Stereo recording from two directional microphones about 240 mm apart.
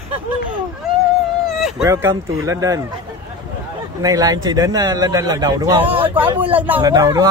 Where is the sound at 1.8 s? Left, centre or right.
Centre.